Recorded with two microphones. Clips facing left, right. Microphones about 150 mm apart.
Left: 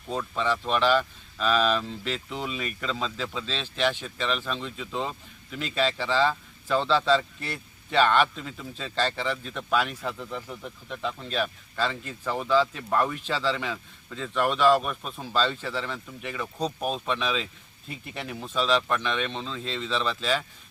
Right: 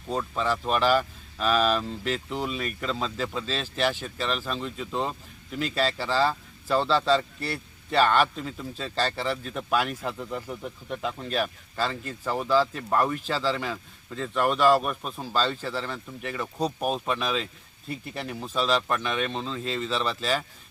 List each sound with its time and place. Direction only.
0.1 s speech: centre (ahead or behind)
9.3 s speech: 40° right (ahead or behind)
9.6 s speech: 5° right (ahead or behind)